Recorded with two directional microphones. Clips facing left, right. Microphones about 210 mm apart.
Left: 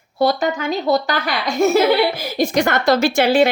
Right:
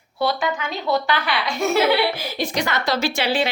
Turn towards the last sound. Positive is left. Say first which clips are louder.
# left 7 dB
turn(degrees=45)  # may be behind; listen again after turning